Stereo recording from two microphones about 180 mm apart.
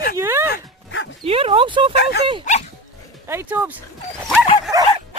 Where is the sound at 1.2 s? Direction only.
30° right (ahead or behind).